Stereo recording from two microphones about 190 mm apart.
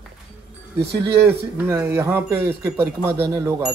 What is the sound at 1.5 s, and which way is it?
Speech, 15° right (ahead or behind).